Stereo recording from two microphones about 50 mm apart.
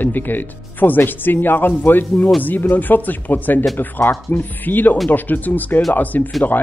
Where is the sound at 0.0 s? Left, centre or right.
Left.